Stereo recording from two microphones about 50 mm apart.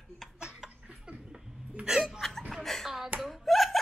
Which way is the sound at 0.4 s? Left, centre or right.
Centre.